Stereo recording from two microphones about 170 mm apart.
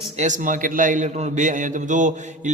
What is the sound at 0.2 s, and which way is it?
A man's voice, 50° right (ahead or behind).